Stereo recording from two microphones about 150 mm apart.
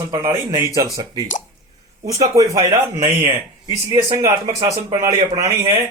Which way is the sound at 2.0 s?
25° right (ahead or behind).